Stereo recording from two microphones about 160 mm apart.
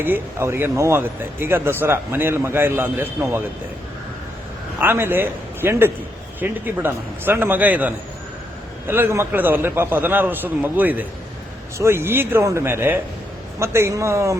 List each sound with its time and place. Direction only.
0.0 s speech: 15° right (ahead or behind)
4.8 s speech: 15° right (ahead or behind)